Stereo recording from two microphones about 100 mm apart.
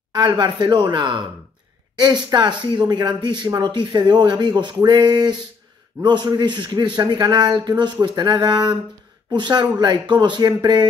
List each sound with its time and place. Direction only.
0.1 s speech: 45° right (ahead or behind)